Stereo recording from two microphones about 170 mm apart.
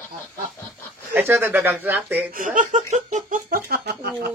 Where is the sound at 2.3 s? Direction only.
50° right (ahead or behind); by 4.3 s 70° right (ahead or behind).